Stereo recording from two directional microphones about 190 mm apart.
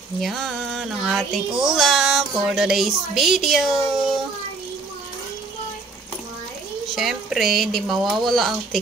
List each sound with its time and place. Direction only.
0.2 s speech: centre (ahead or behind)
6.9 s speech: centre (ahead or behind)